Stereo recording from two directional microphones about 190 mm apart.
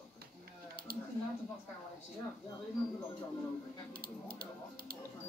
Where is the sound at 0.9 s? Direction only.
50° right (ahead or behind).